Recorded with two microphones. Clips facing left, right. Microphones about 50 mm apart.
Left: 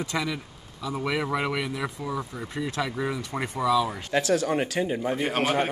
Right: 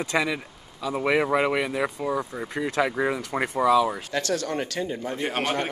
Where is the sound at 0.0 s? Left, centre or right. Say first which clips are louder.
Right 4 dB; right.